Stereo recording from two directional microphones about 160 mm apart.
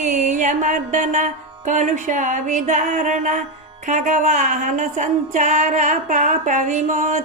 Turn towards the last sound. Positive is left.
turn(degrees=-50)  # may be behind; listen again after turning